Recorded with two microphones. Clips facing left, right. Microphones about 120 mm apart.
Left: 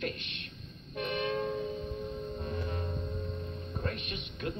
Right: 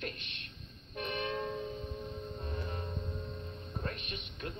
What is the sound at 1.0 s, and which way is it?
Train, 35° right (ahead or behind).